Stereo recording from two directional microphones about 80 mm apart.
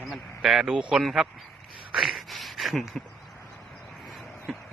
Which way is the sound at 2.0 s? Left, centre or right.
Centre.